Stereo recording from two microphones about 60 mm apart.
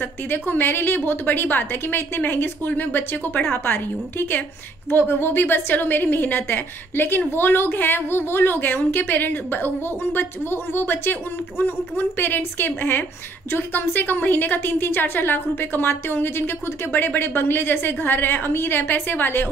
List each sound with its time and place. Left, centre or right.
0.0 s a woman's voice: left